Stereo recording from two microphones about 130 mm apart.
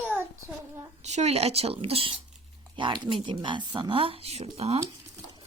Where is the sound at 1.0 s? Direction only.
60° right (ahead or behind).